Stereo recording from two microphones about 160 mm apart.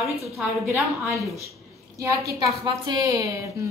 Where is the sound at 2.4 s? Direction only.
25° right (ahead or behind).